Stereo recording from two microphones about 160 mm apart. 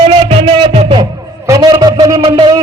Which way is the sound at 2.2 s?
30° right (ahead or behind).